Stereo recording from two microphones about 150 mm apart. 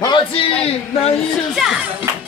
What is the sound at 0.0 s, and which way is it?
Speech, 35° left (ahead or behind).